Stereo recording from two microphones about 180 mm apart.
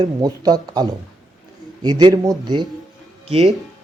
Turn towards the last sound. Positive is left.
turn(degrees=-35)  # may be behind; listen again after turning